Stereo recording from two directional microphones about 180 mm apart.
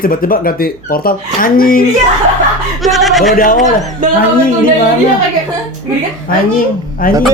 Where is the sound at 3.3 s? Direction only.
50° left (ahead or behind).